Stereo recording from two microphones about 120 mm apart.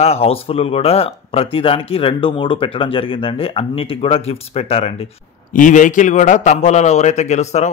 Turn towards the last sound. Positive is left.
turn(degrees=70)  # may be behind; listen again after turning